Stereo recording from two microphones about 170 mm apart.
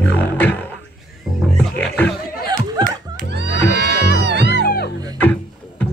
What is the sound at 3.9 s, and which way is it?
Music, 70° left (ahead or behind).